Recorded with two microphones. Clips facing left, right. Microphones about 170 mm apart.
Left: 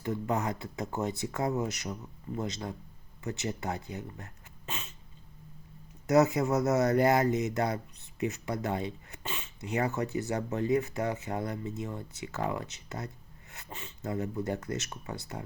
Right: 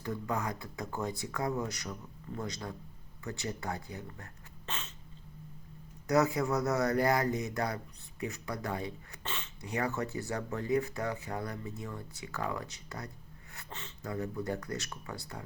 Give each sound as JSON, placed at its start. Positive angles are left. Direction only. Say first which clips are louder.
{"t": 0.0, "sound": "speech", "louder": "left 4 dB", "side_deg": 20}
{"t": 4.6, "sound": "cat", "louder": "left 1 dB", "side_deg": 10}
{"t": 6.1, "sound": "speech", "louder": "left 4 dB", "side_deg": 20}
{"t": 9.2, "sound": "a sound", "louder": "left 2 dB", "side_deg": 10}
{"t": 9.6, "sound": "speech", "louder": "left 3 dB", "side_deg": 20}